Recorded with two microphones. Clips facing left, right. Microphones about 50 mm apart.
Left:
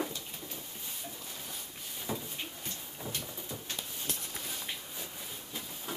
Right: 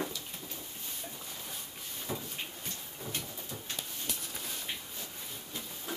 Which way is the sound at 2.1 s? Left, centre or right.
Centre.